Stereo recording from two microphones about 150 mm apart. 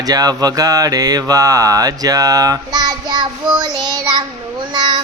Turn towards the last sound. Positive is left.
turn(degrees=-30)  # may be behind; listen again after turning